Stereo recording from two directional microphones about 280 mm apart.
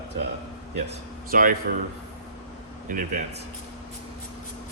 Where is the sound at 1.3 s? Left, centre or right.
Right.